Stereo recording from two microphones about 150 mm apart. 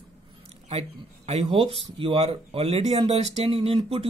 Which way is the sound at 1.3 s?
40° right (ahead or behind).